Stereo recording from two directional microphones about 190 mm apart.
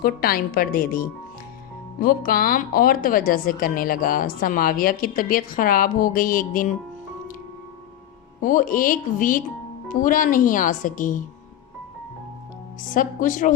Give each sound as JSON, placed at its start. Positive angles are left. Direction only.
{"t": 0.0, "sound": "speech", "side_deg": 50}
{"t": 8.4, "sound": "speech", "side_deg": 45}
{"t": 12.8, "sound": "speech", "side_deg": 45}